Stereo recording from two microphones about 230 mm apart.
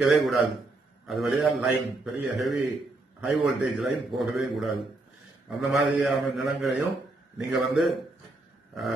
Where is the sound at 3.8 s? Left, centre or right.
Centre.